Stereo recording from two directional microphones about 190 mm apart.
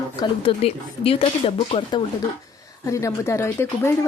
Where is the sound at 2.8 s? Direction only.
15° left (ahead or behind).